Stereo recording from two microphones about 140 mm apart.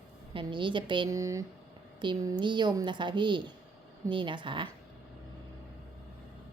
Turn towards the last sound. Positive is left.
turn(degrees=-35)  # may be behind; listen again after turning